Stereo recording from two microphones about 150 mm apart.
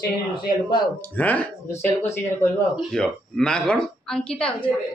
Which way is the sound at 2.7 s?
5° left (ahead or behind).